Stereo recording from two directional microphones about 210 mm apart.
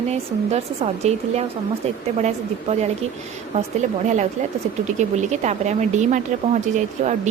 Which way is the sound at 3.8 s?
35° right (ahead or behind).